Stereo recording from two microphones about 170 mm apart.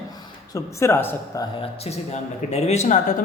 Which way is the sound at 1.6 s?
35° left (ahead or behind).